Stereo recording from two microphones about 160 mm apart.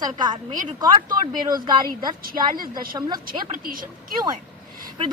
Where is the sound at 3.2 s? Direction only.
60° right (ahead or behind).